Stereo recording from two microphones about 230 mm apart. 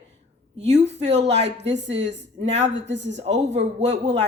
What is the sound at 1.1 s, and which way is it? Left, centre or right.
A woman's voice, right.